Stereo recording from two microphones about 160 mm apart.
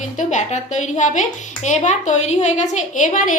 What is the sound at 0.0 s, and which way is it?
A woman's voice, 50° left (ahead or behind).